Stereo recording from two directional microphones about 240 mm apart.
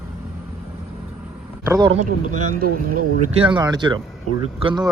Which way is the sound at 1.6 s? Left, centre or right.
Centre.